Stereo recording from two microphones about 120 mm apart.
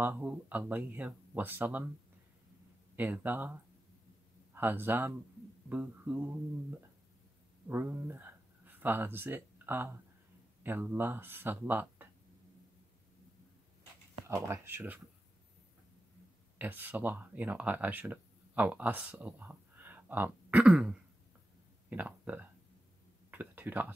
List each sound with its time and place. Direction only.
0.0 s speech: 15° right (ahead or behind)
3.0 s speech: 15° right (ahead or behind)
4.6 s speech: 15° right (ahead or behind)
7.6 s speech: 15° right (ahead or behind)
14.2 s speech: 25° right (ahead or behind)
16.5 s speech: 15° right (ahead or behind)
20.6 s throat clearing: 5° right (ahead or behind)
21.8 s speech: 10° right (ahead or behind)
23.3 s a sound: 15° right (ahead or behind)